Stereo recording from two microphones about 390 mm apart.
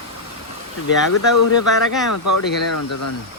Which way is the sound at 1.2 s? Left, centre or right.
Left.